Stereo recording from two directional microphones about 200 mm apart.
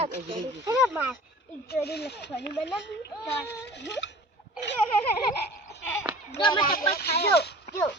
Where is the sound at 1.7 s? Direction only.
55° left (ahead or behind).